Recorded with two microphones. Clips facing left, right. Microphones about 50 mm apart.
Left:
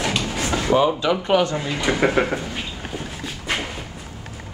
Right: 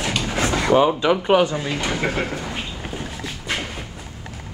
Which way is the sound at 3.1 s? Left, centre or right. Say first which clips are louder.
Left 2 dB; centre.